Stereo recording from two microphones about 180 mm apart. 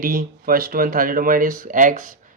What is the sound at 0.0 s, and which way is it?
Speech, 50° right (ahead or behind).